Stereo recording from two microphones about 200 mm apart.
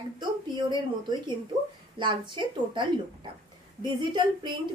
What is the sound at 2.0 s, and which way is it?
Speech, 25° right (ahead or behind).